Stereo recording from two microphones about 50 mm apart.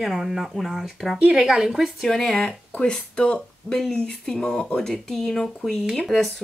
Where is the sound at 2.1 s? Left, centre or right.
Centre.